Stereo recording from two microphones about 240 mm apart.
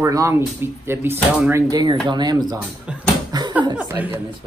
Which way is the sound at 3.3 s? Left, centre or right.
Centre.